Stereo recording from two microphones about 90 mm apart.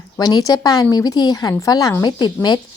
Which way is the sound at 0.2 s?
45° left (ahead or behind).